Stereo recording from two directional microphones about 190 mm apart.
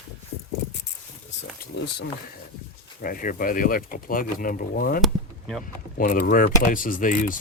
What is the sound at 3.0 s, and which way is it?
Speech, 45° left (ahead or behind).